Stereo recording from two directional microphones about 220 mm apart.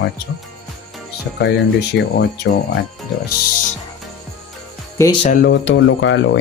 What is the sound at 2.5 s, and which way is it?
Speech, 50° left (ahead or behind).